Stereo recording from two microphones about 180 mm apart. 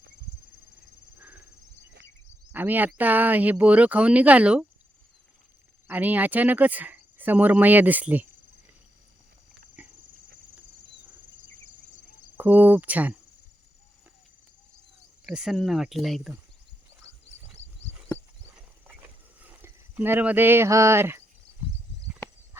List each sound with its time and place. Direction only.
2.5 s speech: 10° right (ahead or behind)
5.9 s speech: 10° right (ahead or behind)
9.8 s dog: 10° right (ahead or behind)
12.4 s speech: 10° right (ahead or behind)
15.3 s speech: 5° right (ahead or behind)
18.4 s a sound: 10° right (ahead or behind)